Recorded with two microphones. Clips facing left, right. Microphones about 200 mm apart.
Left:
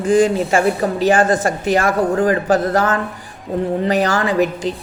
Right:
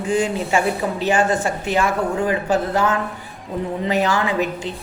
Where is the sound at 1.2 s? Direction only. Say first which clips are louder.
Left 4 dB; 90° left.